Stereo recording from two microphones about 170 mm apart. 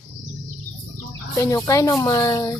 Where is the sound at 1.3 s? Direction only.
20° left (ahead or behind).